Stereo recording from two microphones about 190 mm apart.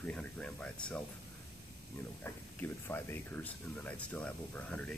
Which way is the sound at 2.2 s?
10° left (ahead or behind).